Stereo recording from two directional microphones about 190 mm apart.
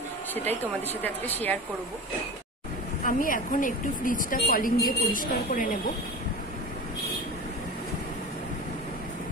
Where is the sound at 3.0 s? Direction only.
45° left (ahead or behind).